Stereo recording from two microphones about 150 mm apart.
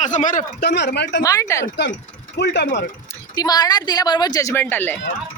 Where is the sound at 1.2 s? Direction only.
20° left (ahead or behind).